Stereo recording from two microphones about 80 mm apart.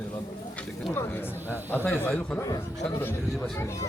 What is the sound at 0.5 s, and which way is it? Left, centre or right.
A man's voice, left.